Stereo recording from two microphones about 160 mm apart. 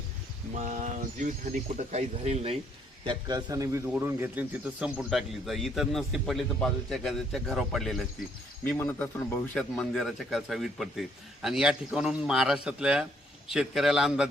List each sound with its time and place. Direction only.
0.5 s speech: 50° right (ahead or behind)
3.0 s a man's voice: 25° right (ahead or behind); by 14.3 s centre (ahead or behind)